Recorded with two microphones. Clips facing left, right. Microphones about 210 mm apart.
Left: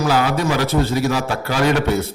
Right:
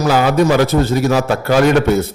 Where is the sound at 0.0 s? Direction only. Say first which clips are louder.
Right 5 dB; 45° right (ahead or behind).